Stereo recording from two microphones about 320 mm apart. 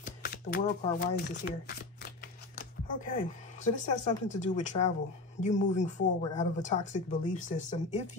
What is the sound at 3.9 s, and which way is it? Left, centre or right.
Speech, left.